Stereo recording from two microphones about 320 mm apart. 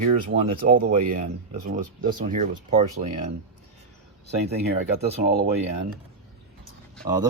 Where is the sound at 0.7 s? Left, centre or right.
Right.